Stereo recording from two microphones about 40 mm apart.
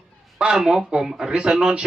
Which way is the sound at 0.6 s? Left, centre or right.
Centre.